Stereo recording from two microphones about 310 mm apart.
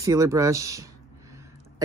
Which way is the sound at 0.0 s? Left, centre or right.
Centre.